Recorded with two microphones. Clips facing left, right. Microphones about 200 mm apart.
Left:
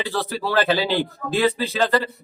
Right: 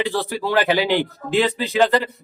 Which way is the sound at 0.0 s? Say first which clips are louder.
Right 3 dB; 15° right (ahead or behind).